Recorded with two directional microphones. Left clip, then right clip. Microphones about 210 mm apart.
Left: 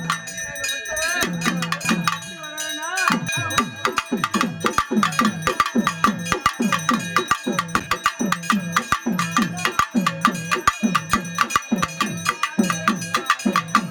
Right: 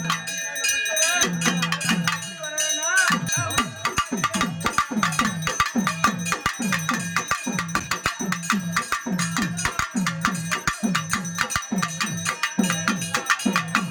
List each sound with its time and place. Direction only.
1.2 s music: 25° left (ahead or behind)
10.2 s cowbell: 30° left (ahead or behind)